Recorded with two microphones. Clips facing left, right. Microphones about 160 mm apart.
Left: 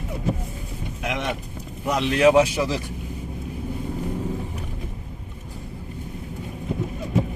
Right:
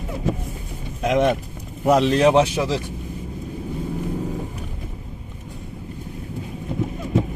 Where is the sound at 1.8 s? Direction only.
40° right (ahead or behind); by 2.7 s 25° right (ahead or behind).